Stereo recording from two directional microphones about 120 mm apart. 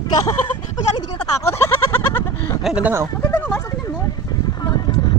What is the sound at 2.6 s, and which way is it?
Speech, 10° right (ahead or behind).